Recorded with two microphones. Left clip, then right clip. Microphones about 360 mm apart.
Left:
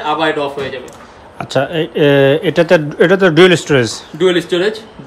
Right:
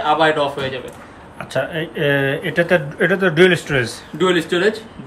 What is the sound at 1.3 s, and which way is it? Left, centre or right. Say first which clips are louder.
Speech: left 6 dB; centre.